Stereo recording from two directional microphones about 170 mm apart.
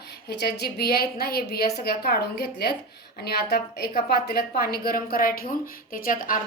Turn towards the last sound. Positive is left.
turn(degrees=55)  # may be behind; listen again after turning